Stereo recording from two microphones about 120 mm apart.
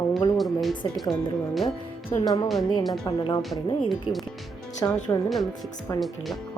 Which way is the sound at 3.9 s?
Centre (ahead or behind).